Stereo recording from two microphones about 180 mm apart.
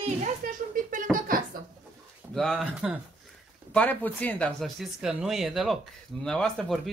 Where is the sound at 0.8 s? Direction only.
50° right (ahead or behind).